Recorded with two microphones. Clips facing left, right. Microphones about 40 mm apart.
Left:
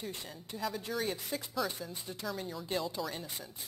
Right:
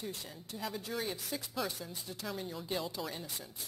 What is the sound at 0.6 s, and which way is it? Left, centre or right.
Speech, centre.